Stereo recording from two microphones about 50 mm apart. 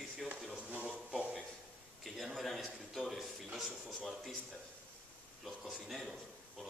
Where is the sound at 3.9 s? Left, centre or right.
Centre.